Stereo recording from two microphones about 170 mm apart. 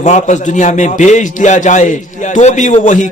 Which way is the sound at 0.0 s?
45° left (ahead or behind).